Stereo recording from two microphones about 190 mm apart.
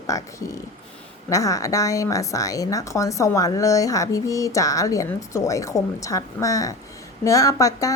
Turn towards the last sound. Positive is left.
turn(degrees=15)  # may be behind; listen again after turning